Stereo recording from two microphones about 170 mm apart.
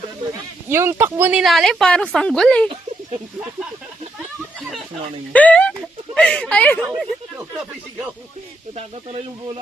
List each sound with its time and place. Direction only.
0.7 s speech: 15° right (ahead or behind); by 2.6 s 5° left (ahead or behind)
5.3 s speech: 10° left (ahead or behind)
8.7 s speech: 40° right (ahead or behind)